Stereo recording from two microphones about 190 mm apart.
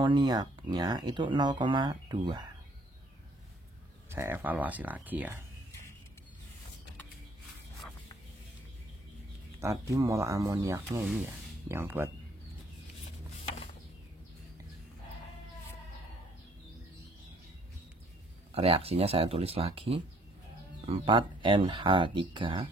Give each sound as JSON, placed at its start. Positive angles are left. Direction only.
{"t": 0.0, "sound": "speech", "side_deg": -25}
{"t": 4.1, "sound": "speech", "side_deg": -10}
{"t": 9.6, "sound": "speech", "side_deg": -15}
{"t": 11.1, "sound": "speech", "side_deg": 0}
{"t": 11.7, "sound": "speech", "side_deg": -10}
{"t": 18.5, "sound": "speech", "side_deg": -30}